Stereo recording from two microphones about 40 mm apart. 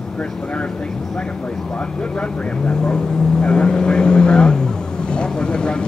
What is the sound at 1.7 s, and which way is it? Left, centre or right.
Speech, left.